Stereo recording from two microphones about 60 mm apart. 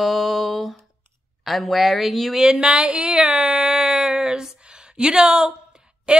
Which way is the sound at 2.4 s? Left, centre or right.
Centre.